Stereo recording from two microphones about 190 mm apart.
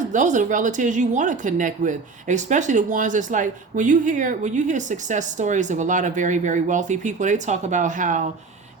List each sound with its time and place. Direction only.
0.1 s a woman's voice: 40° right (ahead or behind)